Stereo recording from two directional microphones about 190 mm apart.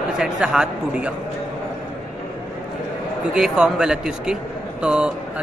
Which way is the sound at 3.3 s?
5° right (ahead or behind).